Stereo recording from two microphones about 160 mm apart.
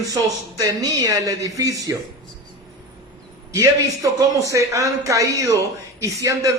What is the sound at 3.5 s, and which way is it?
A man's voice, 20° right (ahead or behind).